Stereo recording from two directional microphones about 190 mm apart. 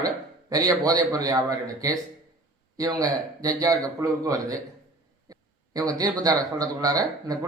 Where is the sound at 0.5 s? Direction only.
20° right (ahead or behind).